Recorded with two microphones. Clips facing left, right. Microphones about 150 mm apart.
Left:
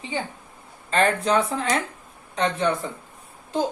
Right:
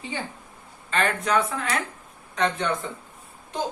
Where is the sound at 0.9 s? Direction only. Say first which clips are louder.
Left 4 dB; 30° left (ahead or behind).